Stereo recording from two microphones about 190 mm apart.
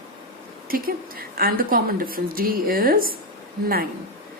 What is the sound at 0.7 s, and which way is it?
A woman's voice, 50° right (ahead or behind).